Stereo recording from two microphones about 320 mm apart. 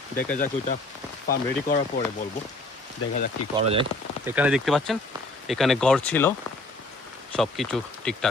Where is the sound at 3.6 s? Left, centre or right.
Centre.